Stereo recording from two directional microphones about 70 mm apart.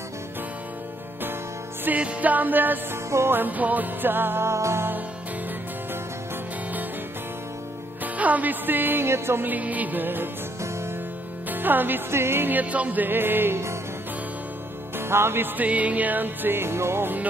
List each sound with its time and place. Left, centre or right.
1.9 s music: right
8.0 s music: right
15.0 s music: right